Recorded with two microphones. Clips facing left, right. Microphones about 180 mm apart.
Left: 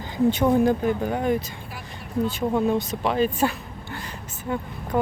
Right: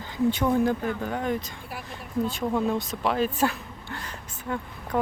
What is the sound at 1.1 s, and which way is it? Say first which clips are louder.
Speech: left 4 dB; 10° left (ahead or behind).